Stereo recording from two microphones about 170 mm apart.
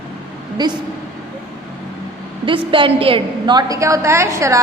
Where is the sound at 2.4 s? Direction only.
30° right (ahead or behind).